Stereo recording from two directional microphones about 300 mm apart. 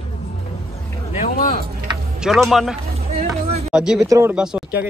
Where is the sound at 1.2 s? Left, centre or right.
Left.